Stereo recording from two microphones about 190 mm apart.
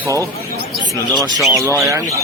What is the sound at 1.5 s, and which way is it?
Speech, 15° right (ahead or behind).